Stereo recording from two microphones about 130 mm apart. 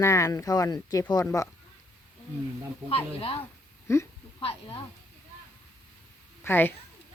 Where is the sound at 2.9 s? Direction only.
45° left (ahead or behind).